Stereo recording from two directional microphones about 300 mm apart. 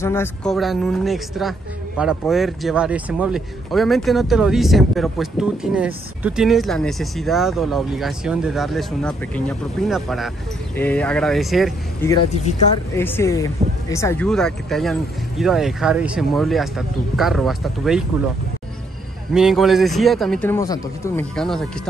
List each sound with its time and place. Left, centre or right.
0.0 s speech: centre
12.1 s speech: left
12.9 s speech: centre
19.3 s speech: centre